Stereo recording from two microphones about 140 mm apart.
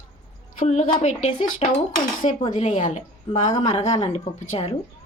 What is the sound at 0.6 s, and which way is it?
Speech, 60° left (ahead or behind).